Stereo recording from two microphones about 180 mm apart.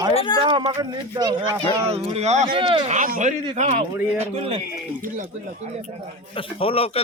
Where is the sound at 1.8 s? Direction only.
35° right (ahead or behind).